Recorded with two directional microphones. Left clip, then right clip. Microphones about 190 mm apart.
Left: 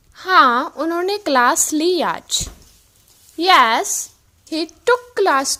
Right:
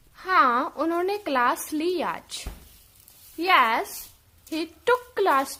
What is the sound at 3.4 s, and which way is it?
A woman's voice, 30° left (ahead or behind).